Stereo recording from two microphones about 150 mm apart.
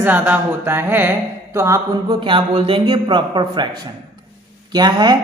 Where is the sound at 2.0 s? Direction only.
35° right (ahead or behind).